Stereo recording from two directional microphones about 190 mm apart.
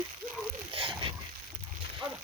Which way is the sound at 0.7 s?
30° right (ahead or behind).